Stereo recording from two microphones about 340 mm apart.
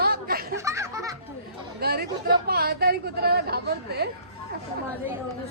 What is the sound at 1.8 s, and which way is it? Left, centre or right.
Speech, right.